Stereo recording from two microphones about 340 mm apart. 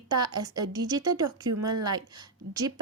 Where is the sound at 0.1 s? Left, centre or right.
Centre.